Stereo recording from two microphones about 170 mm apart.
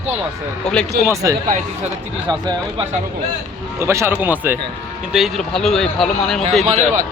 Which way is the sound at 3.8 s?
15° right (ahead or behind).